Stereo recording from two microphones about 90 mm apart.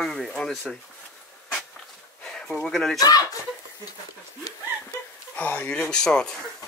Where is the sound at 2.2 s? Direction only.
5° left (ahead or behind).